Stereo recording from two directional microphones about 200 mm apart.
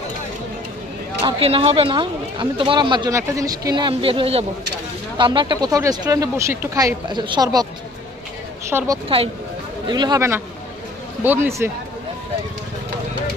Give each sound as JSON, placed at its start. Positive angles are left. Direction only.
{"t": 1.2, "sound": "speech", "side_deg": -25}
{"t": 8.6, "sound": "speech", "side_deg": -15}